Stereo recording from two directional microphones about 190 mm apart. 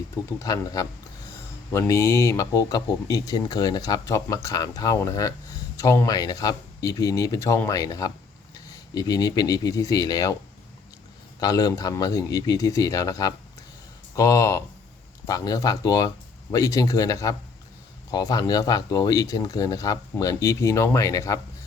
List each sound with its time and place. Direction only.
0.3 s speech: 20° left (ahead or behind)
11.3 s speech: 20° left (ahead or behind)